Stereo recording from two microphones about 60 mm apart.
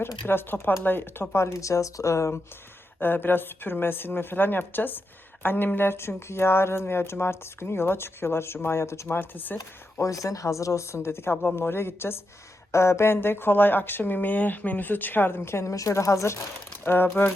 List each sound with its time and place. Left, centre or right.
0.3 s speech: left
1.5 s speech: left
3.0 s speech: left
9.1 s speech: left
9.6 s speech: left
15.7 s speech: left
16.8 s speech: left